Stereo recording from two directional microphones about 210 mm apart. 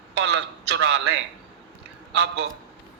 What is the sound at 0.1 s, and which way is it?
Speech, 55° right (ahead or behind).